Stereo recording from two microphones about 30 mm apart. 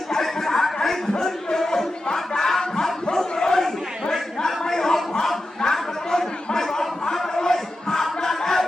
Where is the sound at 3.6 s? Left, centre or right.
Centre.